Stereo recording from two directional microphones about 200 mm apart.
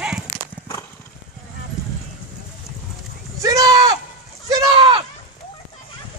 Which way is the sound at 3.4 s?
15° right (ahead or behind).